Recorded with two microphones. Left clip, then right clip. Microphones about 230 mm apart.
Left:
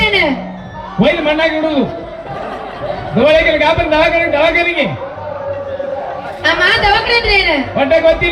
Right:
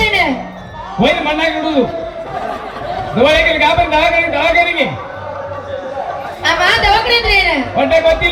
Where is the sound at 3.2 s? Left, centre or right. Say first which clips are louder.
Left 1 dB; left.